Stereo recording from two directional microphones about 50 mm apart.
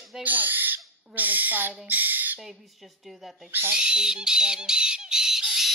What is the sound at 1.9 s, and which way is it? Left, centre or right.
Squawk, right.